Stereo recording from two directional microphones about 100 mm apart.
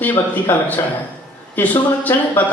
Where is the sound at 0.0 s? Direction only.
20° left (ahead or behind).